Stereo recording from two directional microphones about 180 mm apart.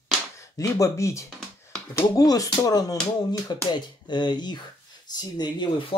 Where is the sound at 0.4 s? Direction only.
20° left (ahead or behind).